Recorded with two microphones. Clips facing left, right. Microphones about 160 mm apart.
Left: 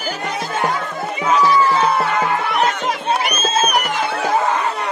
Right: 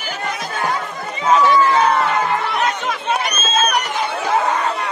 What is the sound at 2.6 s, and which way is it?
Chatter, 35° left (ahead or behind).